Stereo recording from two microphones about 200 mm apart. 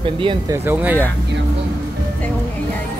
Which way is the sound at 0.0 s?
25° right (ahead or behind).